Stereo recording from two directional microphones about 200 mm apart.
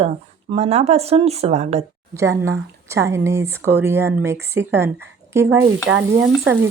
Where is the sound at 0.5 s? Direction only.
30° right (ahead or behind).